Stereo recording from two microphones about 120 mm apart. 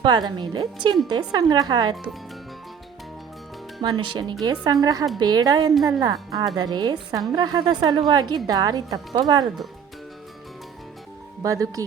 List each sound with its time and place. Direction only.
0.0 s a woman's voice: 35° right (ahead or behind)
3.8 s a woman's voice: 40° right (ahead or behind)
11.4 s speech: 30° right (ahead or behind)